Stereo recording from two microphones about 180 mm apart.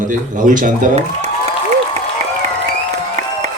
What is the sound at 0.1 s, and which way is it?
Speech, 45° right (ahead or behind).